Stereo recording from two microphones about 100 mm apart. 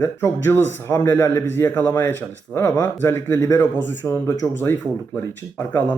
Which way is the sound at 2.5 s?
35° left (ahead or behind).